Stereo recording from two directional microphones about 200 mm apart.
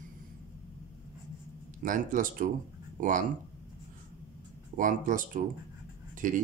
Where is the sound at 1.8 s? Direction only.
40° right (ahead or behind).